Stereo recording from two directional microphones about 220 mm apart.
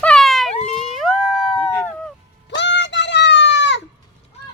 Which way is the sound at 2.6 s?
55° left (ahead or behind).